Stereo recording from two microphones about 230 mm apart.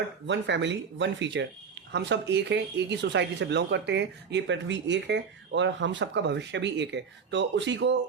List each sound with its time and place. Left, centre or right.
0.3 s speech: right